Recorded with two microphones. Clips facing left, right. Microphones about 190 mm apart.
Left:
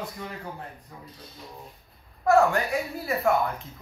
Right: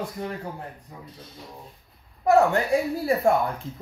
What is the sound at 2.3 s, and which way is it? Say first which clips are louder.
Speech: right 2 dB; 20° right (ahead or behind).